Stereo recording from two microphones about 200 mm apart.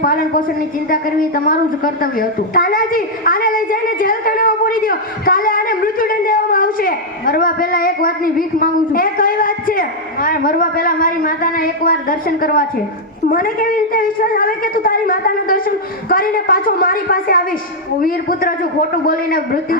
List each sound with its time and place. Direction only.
0.0 s a woman's voice: 45° left (ahead or behind)
1.5 s a woman's voice: 45° left (ahead or behind)